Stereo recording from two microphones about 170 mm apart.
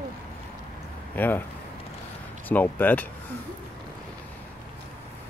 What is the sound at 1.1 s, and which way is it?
Speech, 10° left (ahead or behind).